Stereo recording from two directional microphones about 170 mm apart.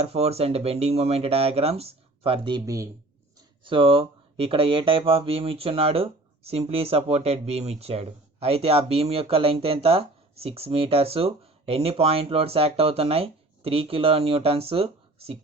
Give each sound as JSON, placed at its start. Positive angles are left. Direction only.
{"t": 0.0, "sound": "speech", "side_deg": -35}
{"t": 3.6, "sound": "speech", "side_deg": -30}